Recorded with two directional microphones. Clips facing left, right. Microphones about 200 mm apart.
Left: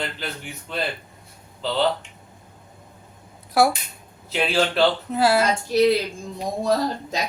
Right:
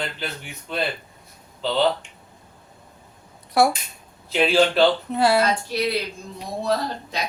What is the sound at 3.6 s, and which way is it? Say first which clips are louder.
Speech: even; centre (ahead or behind).